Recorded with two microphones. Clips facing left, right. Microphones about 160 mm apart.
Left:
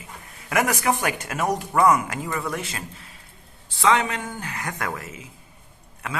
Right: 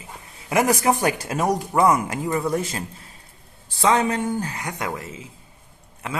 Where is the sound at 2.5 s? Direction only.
35° right (ahead or behind).